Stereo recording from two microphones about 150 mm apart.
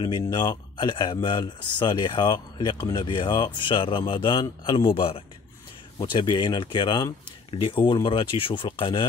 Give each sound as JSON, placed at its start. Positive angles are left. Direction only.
{"t": 0.2, "sound": "speech", "side_deg": 30}